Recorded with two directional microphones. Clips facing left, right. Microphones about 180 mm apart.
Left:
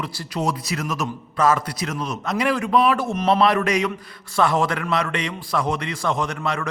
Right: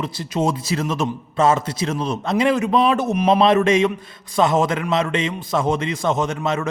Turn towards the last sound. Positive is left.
turn(degrees=-20)  # may be behind; listen again after turning